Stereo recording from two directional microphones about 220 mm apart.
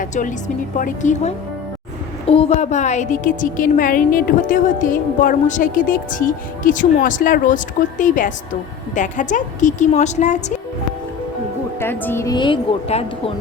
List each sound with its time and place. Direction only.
0.0 s a woman's voice: 35° left (ahead or behind)
11.8 s a woman's voice: 10° left (ahead or behind); by 13.3 s 25° left (ahead or behind)